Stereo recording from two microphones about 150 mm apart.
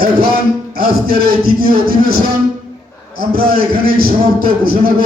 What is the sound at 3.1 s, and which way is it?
A man's voice, 75° right (ahead or behind).